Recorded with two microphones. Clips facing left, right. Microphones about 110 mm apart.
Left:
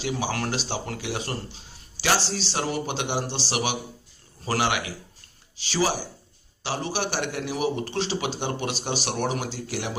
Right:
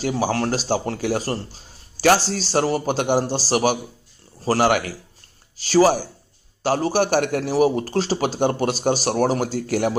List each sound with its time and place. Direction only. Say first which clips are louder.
0.0 s a man's voice: right 6 dB; 40° right (ahead or behind)